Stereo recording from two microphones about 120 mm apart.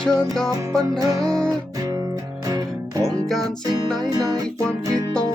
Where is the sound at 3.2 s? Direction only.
5° left (ahead or behind).